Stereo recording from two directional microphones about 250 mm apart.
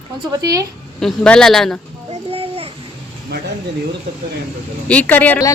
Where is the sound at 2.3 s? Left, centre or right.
Right.